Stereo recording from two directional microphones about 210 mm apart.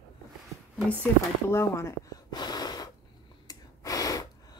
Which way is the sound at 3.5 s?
15° left (ahead or behind).